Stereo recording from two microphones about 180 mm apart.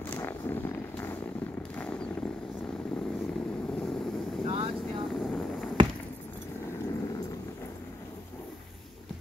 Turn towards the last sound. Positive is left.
turn(degrees=20)  # may be behind; listen again after turning